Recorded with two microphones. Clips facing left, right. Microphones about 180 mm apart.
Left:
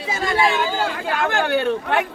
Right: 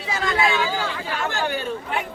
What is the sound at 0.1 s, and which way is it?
Chatter, 25° left (ahead or behind).